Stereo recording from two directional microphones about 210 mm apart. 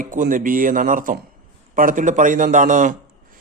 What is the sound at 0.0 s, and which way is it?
Speech, 40° right (ahead or behind).